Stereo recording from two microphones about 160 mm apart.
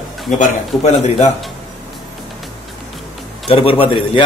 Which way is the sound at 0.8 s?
40° left (ahead or behind).